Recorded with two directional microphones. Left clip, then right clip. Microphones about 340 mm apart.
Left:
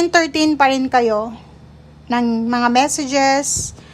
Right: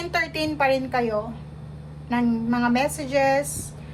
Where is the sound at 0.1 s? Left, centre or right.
Centre.